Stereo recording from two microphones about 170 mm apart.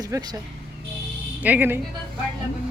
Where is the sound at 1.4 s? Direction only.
10° right (ahead or behind).